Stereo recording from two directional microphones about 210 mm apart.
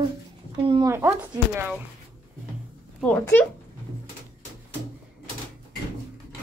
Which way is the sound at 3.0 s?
5° left (ahead or behind).